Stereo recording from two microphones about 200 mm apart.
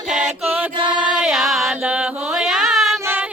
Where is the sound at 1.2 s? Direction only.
Centre (ahead or behind).